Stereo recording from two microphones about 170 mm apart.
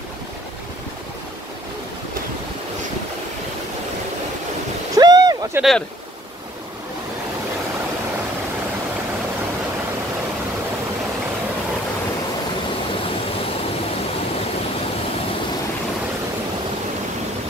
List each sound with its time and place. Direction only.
4.9 s boat: 25° right (ahead or behind)
5.6 s speech: centre (ahead or behind)